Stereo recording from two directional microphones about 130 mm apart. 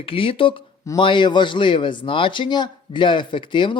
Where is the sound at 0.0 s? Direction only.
45° left (ahead or behind).